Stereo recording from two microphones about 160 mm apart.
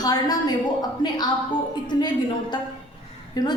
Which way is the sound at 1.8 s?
25° left (ahead or behind).